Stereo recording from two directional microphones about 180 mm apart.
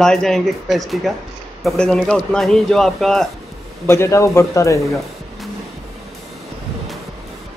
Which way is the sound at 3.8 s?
15° left (ahead or behind).